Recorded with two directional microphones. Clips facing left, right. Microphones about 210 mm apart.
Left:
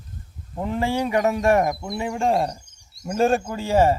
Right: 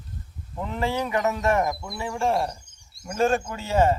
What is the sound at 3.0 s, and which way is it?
Speech, 30° left (ahead or behind).